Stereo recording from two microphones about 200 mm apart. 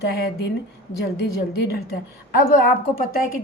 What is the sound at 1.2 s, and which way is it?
Speech, 50° left (ahead or behind).